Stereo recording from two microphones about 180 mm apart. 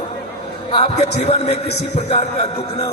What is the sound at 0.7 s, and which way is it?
Speech, 30° left (ahead or behind).